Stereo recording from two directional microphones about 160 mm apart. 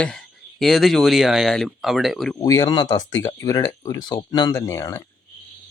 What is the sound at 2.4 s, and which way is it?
Speech, 20° left (ahead or behind).